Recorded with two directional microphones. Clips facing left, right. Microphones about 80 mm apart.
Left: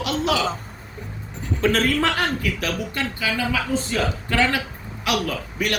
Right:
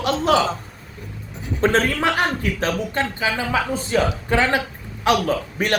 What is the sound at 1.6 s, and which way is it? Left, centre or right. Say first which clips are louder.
Speech: right 2 dB; right.